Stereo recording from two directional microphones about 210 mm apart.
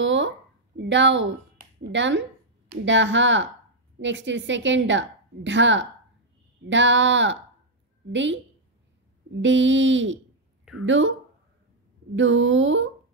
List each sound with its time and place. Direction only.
0.0 s a sound: 60° right (ahead or behind)
0.7 s a woman's voice: 60° right (ahead or behind)
9.4 s a woman's voice: 60° right (ahead or behind)
12.2 s a woman's voice: 65° right (ahead or behind)